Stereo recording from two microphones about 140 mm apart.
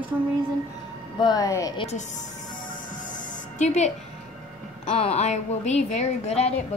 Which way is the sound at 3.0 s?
65° left (ahead or behind).